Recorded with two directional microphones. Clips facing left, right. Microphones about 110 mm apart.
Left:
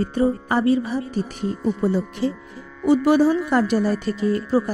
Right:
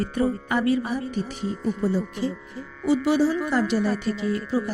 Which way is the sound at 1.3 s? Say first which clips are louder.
Left 3 dB; 55° left (ahead or behind).